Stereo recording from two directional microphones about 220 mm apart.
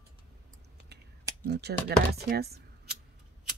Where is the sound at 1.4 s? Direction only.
50° right (ahead or behind).